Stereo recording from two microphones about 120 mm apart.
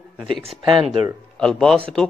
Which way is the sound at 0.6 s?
45° right (ahead or behind).